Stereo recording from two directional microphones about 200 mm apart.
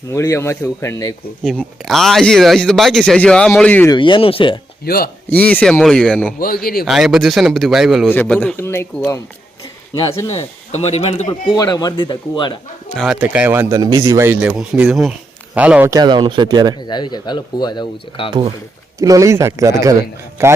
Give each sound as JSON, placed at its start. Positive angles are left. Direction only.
{"t": 0.1, "sound": "a man's voice", "side_deg": 15}
{"t": 1.5, "sound": "speech", "side_deg": 0}
{"t": 3.9, "sound": "speech", "side_deg": 25}
{"t": 4.9, "sound": "a man's voice", "side_deg": 50}
{"t": 5.4, "sound": "speech", "side_deg": 5}
{"t": 6.4, "sound": "a man's voice", "side_deg": 50}
{"t": 6.8, "sound": "a man's voice", "side_deg": 0}
{"t": 12.9, "sound": "a man's voice", "side_deg": 0}
{"t": 16.9, "sound": "speech", "side_deg": 20}
{"t": 18.9, "sound": "speech", "side_deg": -15}